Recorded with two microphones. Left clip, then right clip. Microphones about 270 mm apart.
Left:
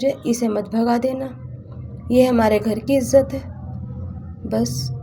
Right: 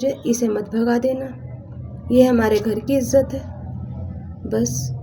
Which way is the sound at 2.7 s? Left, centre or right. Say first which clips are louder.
Left 1 dB; left.